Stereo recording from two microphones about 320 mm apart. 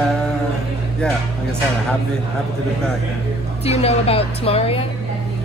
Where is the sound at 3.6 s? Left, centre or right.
Centre.